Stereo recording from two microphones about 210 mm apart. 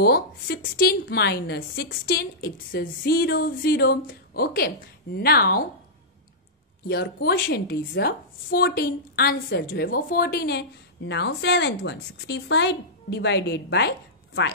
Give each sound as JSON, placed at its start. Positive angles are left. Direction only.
{"t": 0.0, "sound": "a woman's voice", "side_deg": 45}
{"t": 6.9, "sound": "a woman's voice", "side_deg": 50}